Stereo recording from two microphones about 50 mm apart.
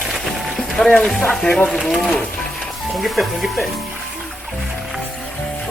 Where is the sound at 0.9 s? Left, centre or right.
Left.